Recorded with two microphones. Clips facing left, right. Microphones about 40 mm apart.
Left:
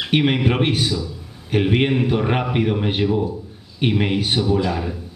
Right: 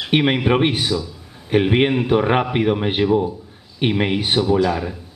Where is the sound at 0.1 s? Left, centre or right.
Centre.